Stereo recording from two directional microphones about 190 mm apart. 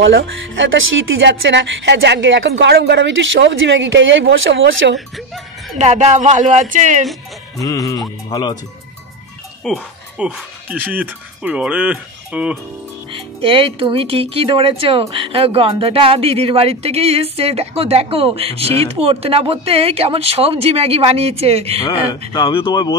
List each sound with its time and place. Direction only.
0.0 s speech: 85° right
4.9 s music: centre (ahead or behind)
5.8 s speech: 35° right (ahead or behind)
7.6 s speech: 20° left (ahead or behind)
9.7 s speech: 5° right (ahead or behind)
13.1 s speech: 30° right (ahead or behind)
21.8 s speech: 20° left (ahead or behind)